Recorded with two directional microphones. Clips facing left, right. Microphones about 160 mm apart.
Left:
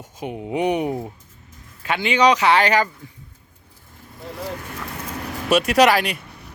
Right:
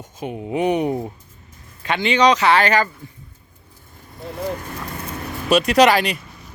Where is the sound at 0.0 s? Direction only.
15° left (ahead or behind).